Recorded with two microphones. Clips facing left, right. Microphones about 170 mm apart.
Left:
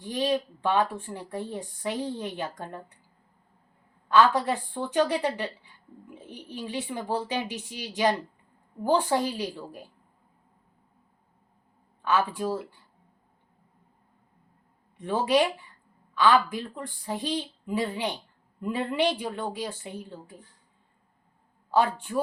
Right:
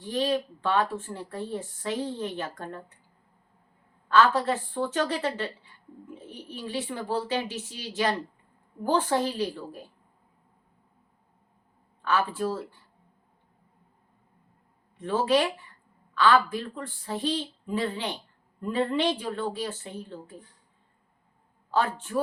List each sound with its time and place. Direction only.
0.0 s a woman's voice: 15° left (ahead or behind)
4.1 s a woman's voice: 15° left (ahead or behind)
12.0 s a woman's voice: 15° left (ahead or behind)
14.9 s a woman's voice: 15° left (ahead or behind)
21.7 s a woman's voice: 15° left (ahead or behind)